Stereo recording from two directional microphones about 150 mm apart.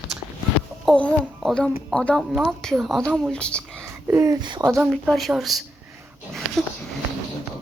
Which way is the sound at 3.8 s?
20° right (ahead or behind).